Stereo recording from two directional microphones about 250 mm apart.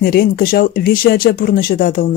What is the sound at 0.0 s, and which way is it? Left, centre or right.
Speech, left.